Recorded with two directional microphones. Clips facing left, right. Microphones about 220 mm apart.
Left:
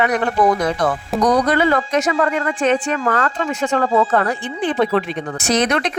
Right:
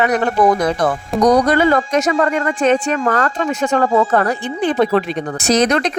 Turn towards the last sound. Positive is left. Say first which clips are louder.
# right 3 dB
turn(degrees=-40)  # may be behind; listen again after turning